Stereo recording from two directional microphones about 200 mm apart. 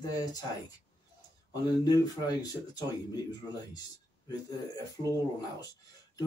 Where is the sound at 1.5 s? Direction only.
15° left (ahead or behind).